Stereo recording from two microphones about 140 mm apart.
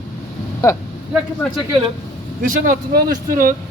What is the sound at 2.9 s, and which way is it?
Speech, 85° right.